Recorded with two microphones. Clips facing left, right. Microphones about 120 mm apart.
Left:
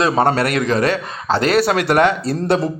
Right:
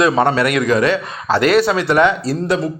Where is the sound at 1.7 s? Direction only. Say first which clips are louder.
Right 1 dB; 50° left (ahead or behind).